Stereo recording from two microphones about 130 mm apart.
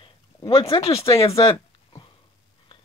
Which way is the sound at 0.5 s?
50° left (ahead or behind).